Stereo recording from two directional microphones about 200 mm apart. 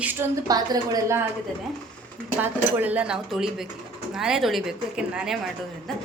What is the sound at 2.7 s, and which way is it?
A woman's voice, 10° right (ahead or behind).